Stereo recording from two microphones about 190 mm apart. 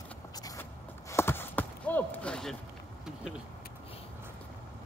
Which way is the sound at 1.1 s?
10° left (ahead or behind).